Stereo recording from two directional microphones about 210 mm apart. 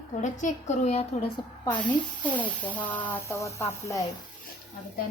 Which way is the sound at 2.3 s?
5° left (ahead or behind).